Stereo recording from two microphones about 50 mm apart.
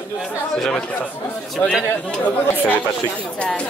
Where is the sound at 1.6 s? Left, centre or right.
Left.